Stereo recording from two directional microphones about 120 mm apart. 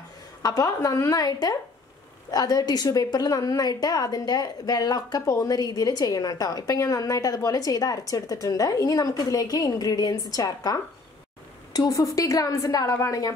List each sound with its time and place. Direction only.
0.4 s a woman's voice: 30° left (ahead or behind)